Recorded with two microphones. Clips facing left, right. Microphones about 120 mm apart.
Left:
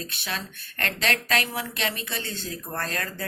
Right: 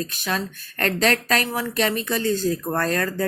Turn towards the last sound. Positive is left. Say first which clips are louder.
# right 9 dB
turn(degrees=-40)  # may be behind; listen again after turning